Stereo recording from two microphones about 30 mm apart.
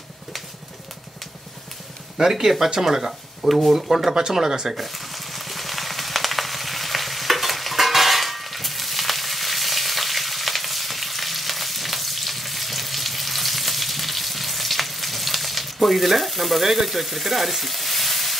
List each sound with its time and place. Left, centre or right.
2.1 s speech: centre
4.3 s speech: centre
4.7 s frying: centre